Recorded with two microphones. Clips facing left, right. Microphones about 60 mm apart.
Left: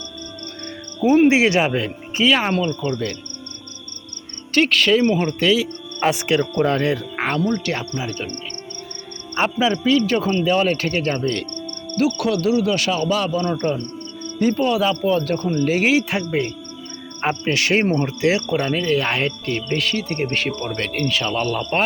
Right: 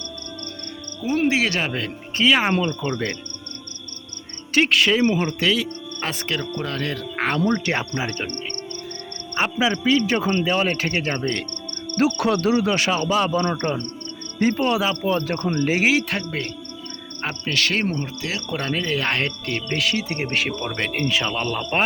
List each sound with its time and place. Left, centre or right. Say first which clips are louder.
1.0 s speech: left 7 dB; left
2.4 s speech: left 1 dB; centre
4.5 s cricket: left 2 dB; centre
5.4 s speech: left 6 dB; centre
6.0 s speech: left 9 dB; centre
6.6 s speech: left 8 dB; left
7.4 s speech: even; right
9.3 s speech: left 2 dB; centre
10.1 s cricket: left 2 dB; centre
11.9 s speech: even; right
14.7 s cricket: left 3 dB; centre
15.9 s speech: left 3 dB; centre
17.2 s speech: left 4 dB; centre
18.4 s cricket: left 5 dB; centre